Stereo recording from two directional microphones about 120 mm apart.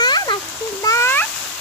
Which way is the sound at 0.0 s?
35° left (ahead or behind).